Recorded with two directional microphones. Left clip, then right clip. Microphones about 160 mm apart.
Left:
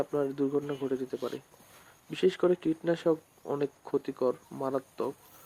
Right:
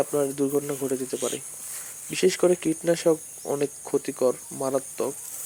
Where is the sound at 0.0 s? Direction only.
15° right (ahead or behind).